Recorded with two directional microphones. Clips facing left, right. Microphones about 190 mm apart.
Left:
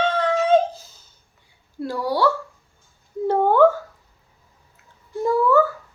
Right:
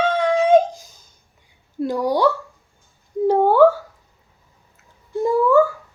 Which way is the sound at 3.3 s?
10° right (ahead or behind).